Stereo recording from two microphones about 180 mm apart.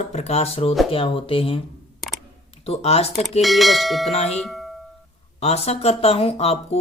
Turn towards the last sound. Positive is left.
turn(degrees=35)  # may be behind; listen again after turning